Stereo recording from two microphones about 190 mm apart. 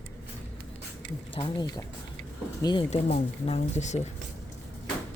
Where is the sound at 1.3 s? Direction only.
25° left (ahead or behind).